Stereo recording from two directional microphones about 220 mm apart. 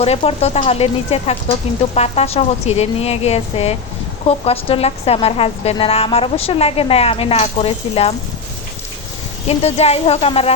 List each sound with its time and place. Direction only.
0.0 s a woman's voice: 30° left (ahead or behind)
9.5 s a woman's voice: 30° left (ahead or behind)